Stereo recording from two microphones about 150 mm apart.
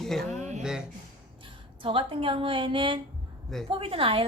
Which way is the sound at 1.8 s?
35° right (ahead or behind).